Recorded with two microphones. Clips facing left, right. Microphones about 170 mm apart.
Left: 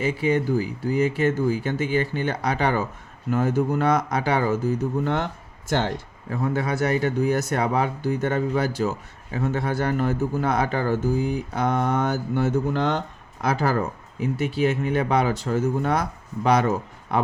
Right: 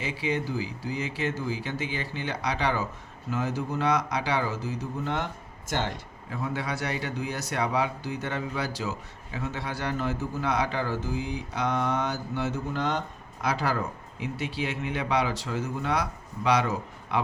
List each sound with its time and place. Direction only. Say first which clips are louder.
0.0 s speech: left 7 dB; 50° left (ahead or behind)
6.3 s speech: left 7 dB; 50° left (ahead or behind)